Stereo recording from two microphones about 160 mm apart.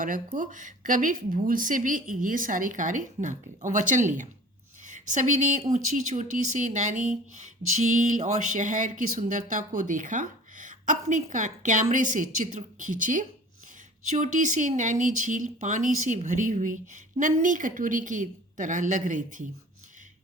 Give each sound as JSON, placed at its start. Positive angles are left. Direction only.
{"t": 0.3, "sound": "a woman's voice", "side_deg": -55}